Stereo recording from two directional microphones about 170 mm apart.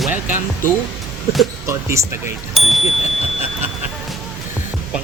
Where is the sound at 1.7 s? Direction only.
15° right (ahead or behind).